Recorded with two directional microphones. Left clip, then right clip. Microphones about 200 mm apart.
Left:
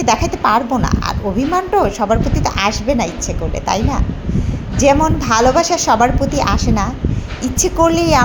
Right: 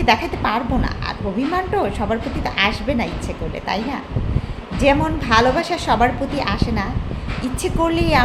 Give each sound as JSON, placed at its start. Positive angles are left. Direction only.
{"t": 0.0, "sound": "a woman's voice", "side_deg": 20}